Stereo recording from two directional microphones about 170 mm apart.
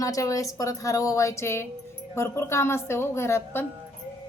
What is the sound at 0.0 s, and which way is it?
A woman's voice, 20° left (ahead or behind).